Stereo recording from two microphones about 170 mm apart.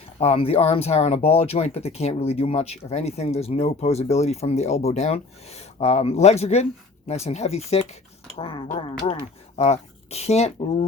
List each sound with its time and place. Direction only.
0.2 s speech: 35° left (ahead or behind)